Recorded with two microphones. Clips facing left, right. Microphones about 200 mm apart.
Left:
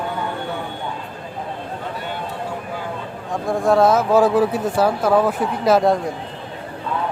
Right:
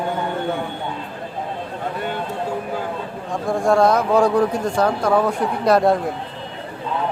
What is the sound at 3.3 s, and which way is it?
Speech, centre (ahead or behind).